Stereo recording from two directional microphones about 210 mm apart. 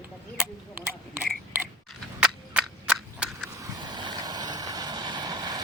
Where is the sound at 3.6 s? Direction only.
20° right (ahead or behind).